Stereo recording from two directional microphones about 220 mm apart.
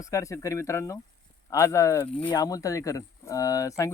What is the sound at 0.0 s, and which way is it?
Speech, 15° left (ahead or behind).